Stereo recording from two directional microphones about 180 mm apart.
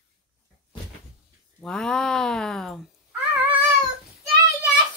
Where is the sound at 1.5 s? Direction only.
5° left (ahead or behind).